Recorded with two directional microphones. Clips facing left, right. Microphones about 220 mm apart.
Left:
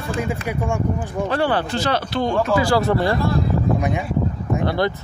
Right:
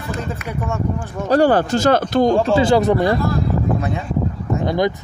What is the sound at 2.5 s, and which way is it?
Speech, 25° right (ahead or behind).